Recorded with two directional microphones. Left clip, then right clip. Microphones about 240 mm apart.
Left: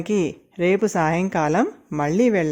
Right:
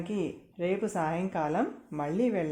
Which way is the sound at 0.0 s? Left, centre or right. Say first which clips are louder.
Left 11 dB; left.